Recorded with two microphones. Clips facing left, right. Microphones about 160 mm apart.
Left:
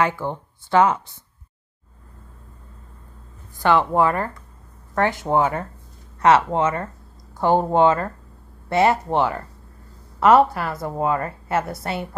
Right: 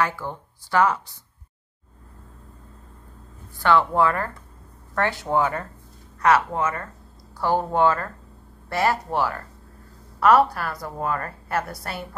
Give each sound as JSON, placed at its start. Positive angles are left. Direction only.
{"t": 0.0, "sound": "a woman's voice", "side_deg": 20}
{"t": 3.5, "sound": "a woman's voice", "side_deg": 20}